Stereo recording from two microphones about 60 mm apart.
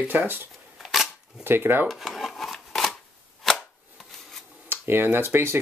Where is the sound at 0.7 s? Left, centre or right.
Centre.